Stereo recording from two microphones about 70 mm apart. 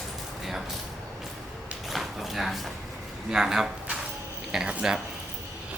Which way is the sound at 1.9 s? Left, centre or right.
Centre.